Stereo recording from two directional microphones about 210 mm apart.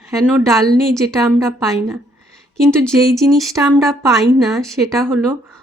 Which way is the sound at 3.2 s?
Centre (ahead or behind).